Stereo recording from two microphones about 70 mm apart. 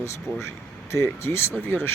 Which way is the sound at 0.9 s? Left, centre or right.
Left.